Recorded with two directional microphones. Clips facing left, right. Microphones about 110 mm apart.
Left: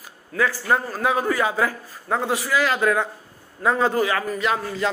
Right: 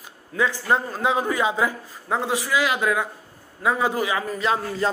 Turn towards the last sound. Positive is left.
turn(degrees=-30)  # may be behind; listen again after turning